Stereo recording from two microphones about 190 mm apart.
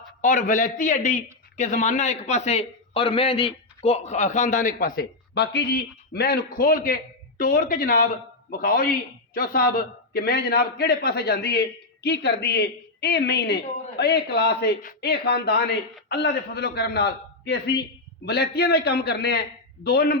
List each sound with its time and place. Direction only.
0.2 s a man's voice: 45° left (ahead or behind)